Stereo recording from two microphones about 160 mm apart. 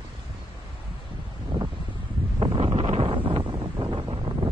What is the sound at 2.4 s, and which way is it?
Wind noise, 35° right (ahead or behind).